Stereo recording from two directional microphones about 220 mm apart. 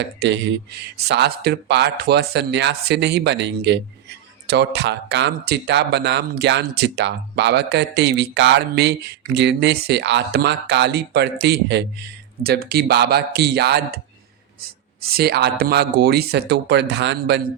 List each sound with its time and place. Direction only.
0.2 s speech: 55° right (ahead or behind)
15.1 s speech: 45° right (ahead or behind)